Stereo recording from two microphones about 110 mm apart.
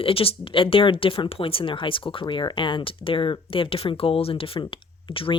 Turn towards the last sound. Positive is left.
turn(degrees=55)  # may be behind; listen again after turning